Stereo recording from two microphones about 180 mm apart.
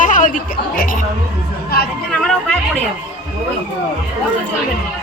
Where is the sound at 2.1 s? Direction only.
5° left (ahead or behind).